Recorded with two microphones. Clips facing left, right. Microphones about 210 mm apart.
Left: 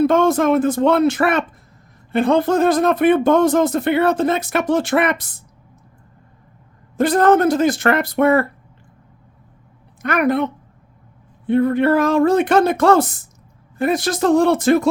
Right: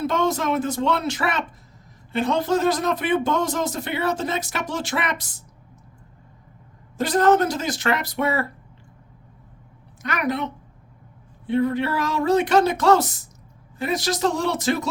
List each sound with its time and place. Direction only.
0.0 s speech: 55° left (ahead or behind)
6.9 s speech: 55° left (ahead or behind)
10.0 s speech: 55° left (ahead or behind)